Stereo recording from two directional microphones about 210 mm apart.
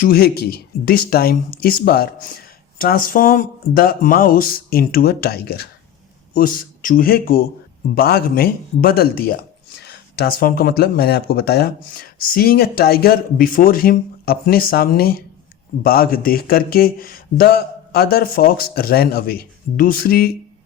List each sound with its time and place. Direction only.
0.0 s a man's voice: 45° left (ahead or behind)